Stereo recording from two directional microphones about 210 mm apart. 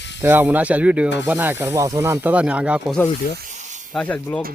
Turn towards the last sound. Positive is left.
turn(degrees=10)  # may be behind; listen again after turning